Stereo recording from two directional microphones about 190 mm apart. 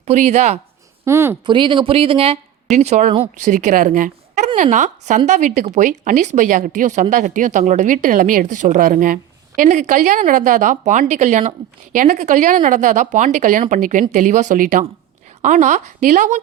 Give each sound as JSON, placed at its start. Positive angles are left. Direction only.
{"t": 0.0, "sound": "speech", "side_deg": -35}
{"t": 1.0, "sound": "a woman's voice", "side_deg": -15}
{"t": 1.5, "sound": "speech", "side_deg": -25}